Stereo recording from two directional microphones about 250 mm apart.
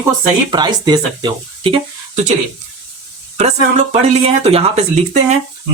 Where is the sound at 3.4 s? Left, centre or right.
Right.